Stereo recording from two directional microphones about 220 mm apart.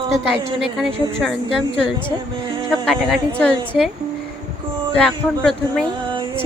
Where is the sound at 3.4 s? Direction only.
Centre (ahead or behind).